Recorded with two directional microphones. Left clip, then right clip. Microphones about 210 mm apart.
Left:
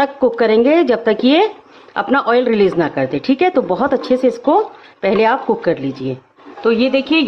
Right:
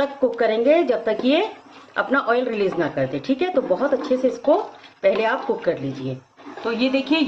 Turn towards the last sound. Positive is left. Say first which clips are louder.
# left 8 dB
turn(degrees=40)  # may be behind; listen again after turning